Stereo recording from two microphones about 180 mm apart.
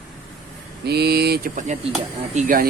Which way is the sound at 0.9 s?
65° right (ahead or behind).